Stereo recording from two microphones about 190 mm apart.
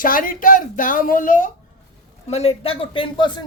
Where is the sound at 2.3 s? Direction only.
35° left (ahead or behind).